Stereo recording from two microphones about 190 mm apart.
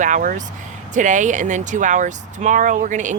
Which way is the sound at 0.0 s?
45° right (ahead or behind).